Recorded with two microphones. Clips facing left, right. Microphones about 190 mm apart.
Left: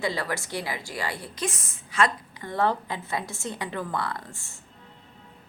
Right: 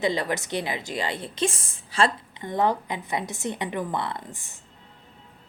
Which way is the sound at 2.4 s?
15° right (ahead or behind).